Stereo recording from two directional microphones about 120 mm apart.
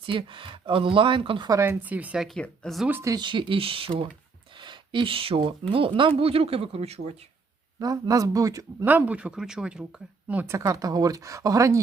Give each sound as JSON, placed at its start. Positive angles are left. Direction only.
{"t": 0.0, "sound": "speech", "side_deg": -45}
{"t": 1.5, "sound": "speech", "side_deg": -25}
{"t": 1.8, "sound": "speech", "side_deg": -15}
{"t": 2.2, "sound": "speech", "side_deg": 5}
{"t": 3.0, "sound": "speech", "side_deg": -30}
{"t": 3.2, "sound": "speech", "side_deg": -45}
{"t": 7.8, "sound": "speech", "side_deg": -30}
{"t": 8.8, "sound": "speech", "side_deg": -15}
{"t": 10.2, "sound": "speech", "side_deg": -15}